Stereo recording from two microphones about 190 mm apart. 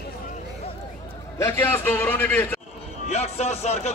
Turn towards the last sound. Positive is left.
turn(degrees=35)  # may be behind; listen again after turning